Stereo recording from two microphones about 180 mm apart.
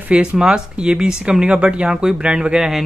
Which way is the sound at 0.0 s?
5° right (ahead or behind).